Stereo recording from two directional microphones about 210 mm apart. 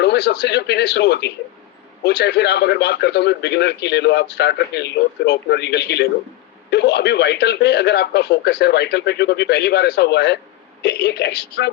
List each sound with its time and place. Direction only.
0.0 s a man's voice: 55° left (ahead or behind)